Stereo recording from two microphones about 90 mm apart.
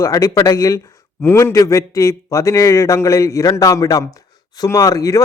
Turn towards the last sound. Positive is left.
turn(degrees=40)  # may be behind; listen again after turning